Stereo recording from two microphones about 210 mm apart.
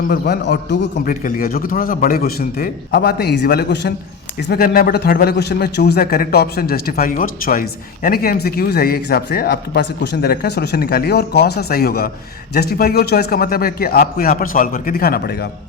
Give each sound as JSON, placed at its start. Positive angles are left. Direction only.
{"t": 0.1, "sound": "speech", "side_deg": 55}
{"t": 1.2, "sound": "speech", "side_deg": 45}